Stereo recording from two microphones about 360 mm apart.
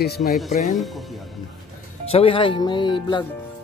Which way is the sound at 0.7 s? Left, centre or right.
Centre.